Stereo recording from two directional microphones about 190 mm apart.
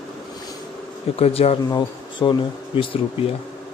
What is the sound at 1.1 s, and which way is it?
Speech, 30° left (ahead or behind).